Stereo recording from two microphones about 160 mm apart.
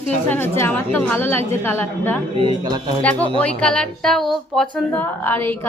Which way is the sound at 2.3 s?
25° right (ahead or behind).